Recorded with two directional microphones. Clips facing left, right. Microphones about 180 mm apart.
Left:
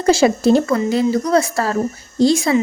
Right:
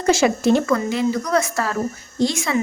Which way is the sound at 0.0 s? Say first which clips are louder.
Left 3 dB; 35° left (ahead or behind).